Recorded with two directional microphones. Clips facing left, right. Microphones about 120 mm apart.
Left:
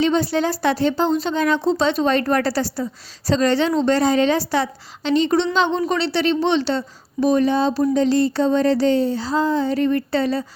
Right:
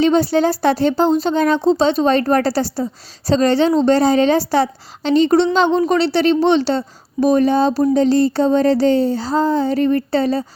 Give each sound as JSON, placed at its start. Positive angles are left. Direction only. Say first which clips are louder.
{"t": 0.0, "sound": "speech", "louder": "right 4 dB", "side_deg": -35}